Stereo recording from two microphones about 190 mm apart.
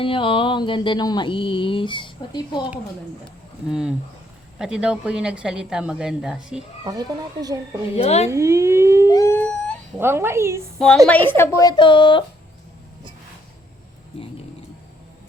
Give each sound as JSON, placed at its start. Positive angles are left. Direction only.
{"t": 0.0, "sound": "a sound", "side_deg": 30}
{"t": 3.7, "sound": "a woman's voice", "side_deg": -5}
{"t": 6.8, "sound": "speech", "side_deg": -20}
{"t": 7.9, "sound": "speech", "side_deg": 35}
{"t": 8.3, "sound": "siren", "side_deg": -15}
{"t": 9.0, "sound": "a sound", "side_deg": 15}
{"t": 10.0, "sound": "siren", "side_deg": -10}
{"t": 10.8, "sound": "a woman's voice", "side_deg": 0}
{"t": 11.3, "sound": "a sound", "side_deg": 15}